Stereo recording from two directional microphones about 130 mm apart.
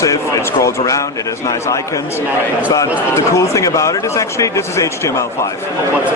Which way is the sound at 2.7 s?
25° left (ahead or behind).